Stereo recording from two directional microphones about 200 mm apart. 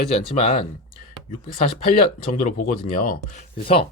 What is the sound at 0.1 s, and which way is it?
Speech, 30° left (ahead or behind).